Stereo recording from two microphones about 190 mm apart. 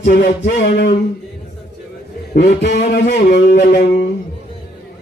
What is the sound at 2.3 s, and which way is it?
Music, 60° left (ahead or behind).